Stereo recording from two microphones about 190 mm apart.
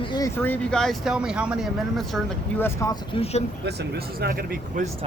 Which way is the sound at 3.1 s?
30° left (ahead or behind).